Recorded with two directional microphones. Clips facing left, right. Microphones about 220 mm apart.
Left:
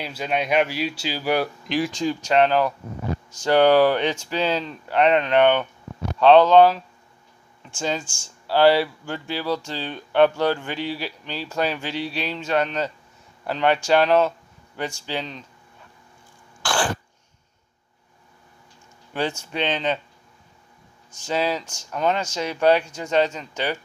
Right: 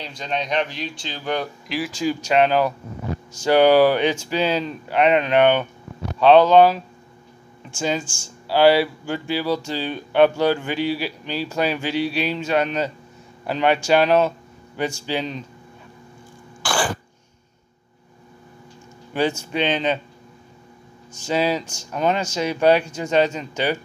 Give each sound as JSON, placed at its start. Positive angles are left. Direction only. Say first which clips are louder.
{"t": 0.0, "sound": "speech", "louder": "left 2 dB", "side_deg": 10}
{"t": 16.6, "sound": "throat clearing", "louder": "right 1 dB", "side_deg": -5}
{"t": 19.1, "sound": "speech", "louder": "right 4 dB", "side_deg": -10}
{"t": 21.3, "sound": "speech", "louder": "right 3 dB", "side_deg": -10}